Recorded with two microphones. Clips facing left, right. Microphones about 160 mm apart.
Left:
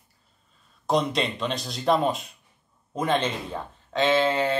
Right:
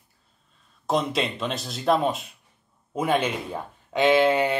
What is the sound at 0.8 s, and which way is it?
Speech, centre (ahead or behind).